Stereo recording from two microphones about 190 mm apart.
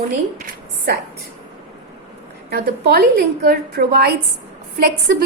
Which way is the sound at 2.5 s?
55° right (ahead or behind).